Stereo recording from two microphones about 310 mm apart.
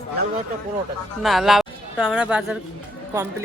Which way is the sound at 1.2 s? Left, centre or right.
Centre.